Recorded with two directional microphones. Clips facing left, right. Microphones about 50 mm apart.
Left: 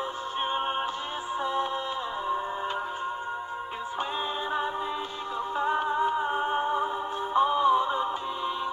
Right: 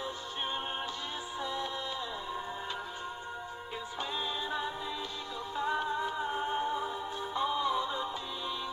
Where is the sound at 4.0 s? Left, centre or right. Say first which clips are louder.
Left 5 dB; left.